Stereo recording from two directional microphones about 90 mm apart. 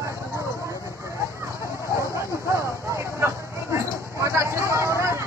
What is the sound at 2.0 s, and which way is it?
Vehicle, 35° right (ahead or behind).